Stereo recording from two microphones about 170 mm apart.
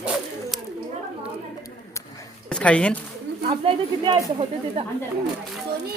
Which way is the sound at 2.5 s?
5° left (ahead or behind).